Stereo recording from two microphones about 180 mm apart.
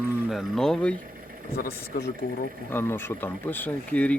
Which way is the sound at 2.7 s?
10° left (ahead or behind).